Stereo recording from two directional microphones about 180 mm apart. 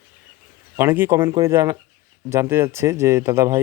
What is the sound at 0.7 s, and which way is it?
Speech, 10° right (ahead or behind).